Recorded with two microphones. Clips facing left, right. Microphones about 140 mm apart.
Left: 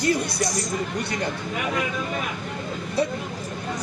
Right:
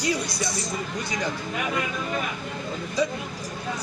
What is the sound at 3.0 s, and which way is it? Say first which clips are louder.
Speech: left 1 dB; 60° left (ahead or behind).